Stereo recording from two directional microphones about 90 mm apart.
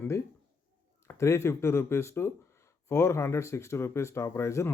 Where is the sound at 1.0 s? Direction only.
30° left (ahead or behind).